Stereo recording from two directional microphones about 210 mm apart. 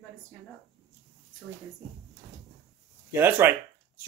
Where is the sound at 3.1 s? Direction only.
10° right (ahead or behind).